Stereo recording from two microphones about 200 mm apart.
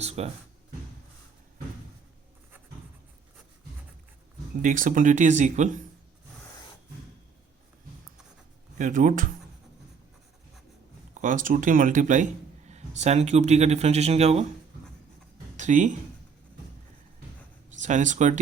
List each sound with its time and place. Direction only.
0.0 s a sound: 30° right (ahead or behind)
4.6 s speech: 40° right (ahead or behind)
8.8 s speech: 40° right (ahead or behind)
11.1 s a man's voice: 40° right (ahead or behind)
15.5 s speech: 35° right (ahead or behind)
17.7 s speech: 40° right (ahead or behind)